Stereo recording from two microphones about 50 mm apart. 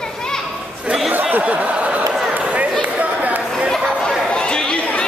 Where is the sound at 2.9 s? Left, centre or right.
Right.